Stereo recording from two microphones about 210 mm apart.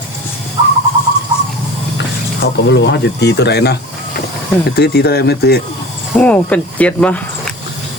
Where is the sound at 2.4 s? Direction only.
55° left (ahead or behind).